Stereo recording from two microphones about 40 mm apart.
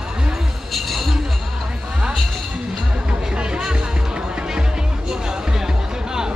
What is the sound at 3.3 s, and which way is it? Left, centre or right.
Music, right.